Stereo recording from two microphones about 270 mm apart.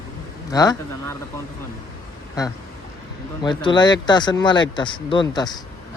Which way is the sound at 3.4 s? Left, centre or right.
Centre.